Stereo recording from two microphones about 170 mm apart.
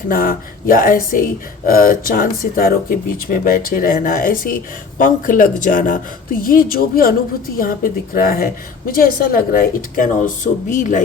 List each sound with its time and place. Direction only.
0.1 s speech: 55° left (ahead or behind)